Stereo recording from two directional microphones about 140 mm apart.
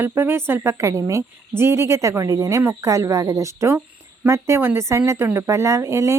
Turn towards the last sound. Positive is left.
turn(degrees=-20)  # may be behind; listen again after turning